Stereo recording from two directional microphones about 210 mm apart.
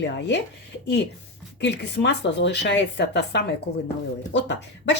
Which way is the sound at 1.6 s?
55° left (ahead or behind).